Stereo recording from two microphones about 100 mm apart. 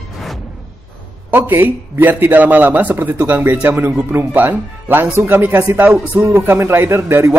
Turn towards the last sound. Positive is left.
turn(degrees=-25)  # may be behind; listen again after turning